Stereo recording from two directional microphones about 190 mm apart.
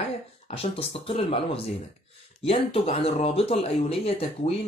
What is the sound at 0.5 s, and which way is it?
Speech, 30° left (ahead or behind).